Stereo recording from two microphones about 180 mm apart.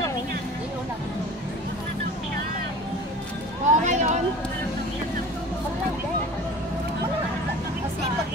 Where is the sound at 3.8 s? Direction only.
40° right (ahead or behind).